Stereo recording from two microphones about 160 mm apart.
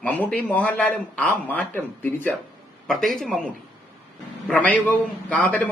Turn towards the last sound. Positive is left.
turn(degrees=10)  # may be behind; listen again after turning